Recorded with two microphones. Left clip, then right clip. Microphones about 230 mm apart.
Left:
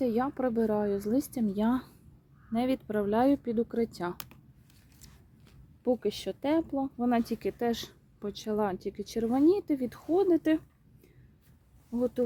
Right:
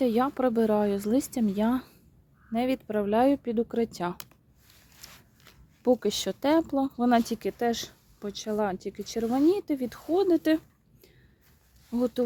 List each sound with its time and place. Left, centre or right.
0.0 s speech: right
5.5 s speech: right
11.9 s speech: right